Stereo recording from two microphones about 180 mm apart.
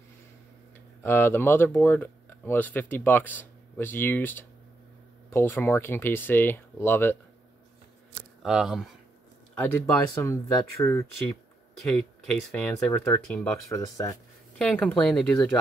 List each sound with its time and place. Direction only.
1.0 s speech: 10° left (ahead or behind)
8.4 s speech: 5° right (ahead or behind)
9.6 s speech: 15° left (ahead or behind)
11.8 s speech: 5° left (ahead or behind)
14.6 s speech: 5° left (ahead or behind)